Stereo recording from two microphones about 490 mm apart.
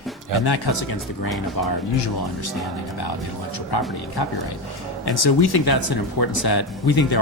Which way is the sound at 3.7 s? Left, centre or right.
Left.